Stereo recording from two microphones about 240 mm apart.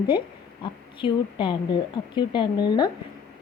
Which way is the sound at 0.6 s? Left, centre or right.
Left.